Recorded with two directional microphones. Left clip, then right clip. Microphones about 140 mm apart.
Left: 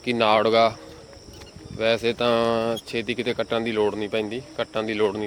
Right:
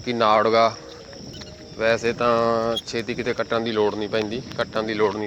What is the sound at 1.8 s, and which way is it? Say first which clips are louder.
Speech: right 1 dB; 20° left (ahead or behind).